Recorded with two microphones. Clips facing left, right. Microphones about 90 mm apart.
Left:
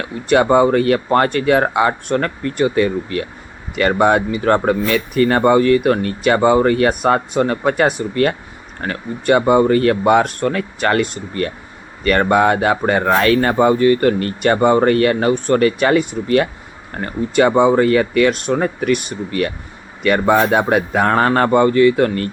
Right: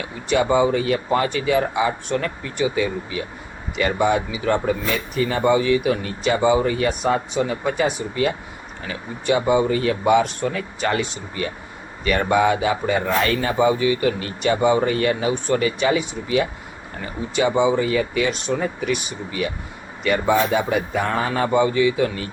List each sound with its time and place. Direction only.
0.0 s speech: 55° left (ahead or behind)